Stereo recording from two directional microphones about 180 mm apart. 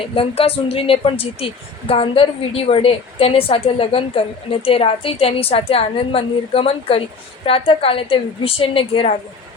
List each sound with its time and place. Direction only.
0.1 s a woman's voice: 30° left (ahead or behind)